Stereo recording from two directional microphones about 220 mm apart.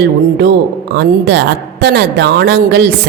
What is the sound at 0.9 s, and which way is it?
A woman's voice, 50° right (ahead or behind).